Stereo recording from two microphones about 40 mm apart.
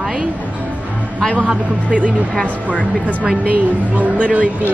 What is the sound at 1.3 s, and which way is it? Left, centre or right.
A woman's voice, right.